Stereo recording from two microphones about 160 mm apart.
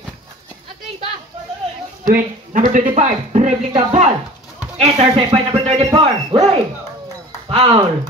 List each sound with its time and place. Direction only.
2.0 s speech: 55° right (ahead or behind); by 6.1 s 25° right (ahead or behind)
6.3 s speech: 40° right (ahead or behind)